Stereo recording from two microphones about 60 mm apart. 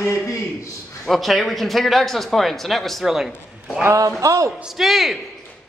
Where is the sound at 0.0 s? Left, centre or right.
Left.